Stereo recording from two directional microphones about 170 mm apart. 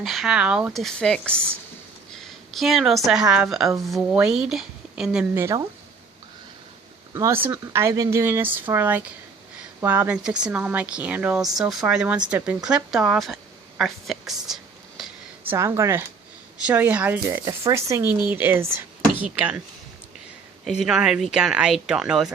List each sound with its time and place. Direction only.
0.0 s speech: centre (ahead or behind)
2.5 s speech: centre (ahead or behind)
5.4 s speech: 15° right (ahead or behind)
7.1 s a woman's voice: 20° right (ahead or behind); by 15.1 s centre (ahead or behind)
15.4 s speech: 15° right (ahead or behind)
20.7 s speech: centre (ahead or behind)